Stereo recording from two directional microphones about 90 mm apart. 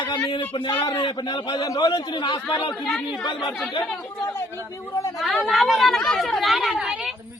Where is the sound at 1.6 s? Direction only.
45° left (ahead or behind).